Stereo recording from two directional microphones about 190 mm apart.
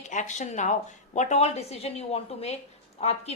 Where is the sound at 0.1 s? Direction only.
40° left (ahead or behind).